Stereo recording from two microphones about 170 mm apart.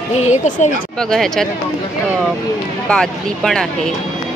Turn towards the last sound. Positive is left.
turn(degrees=5)  # may be behind; listen again after turning